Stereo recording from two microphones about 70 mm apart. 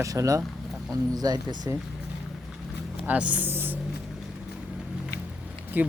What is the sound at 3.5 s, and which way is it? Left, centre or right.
Music, right.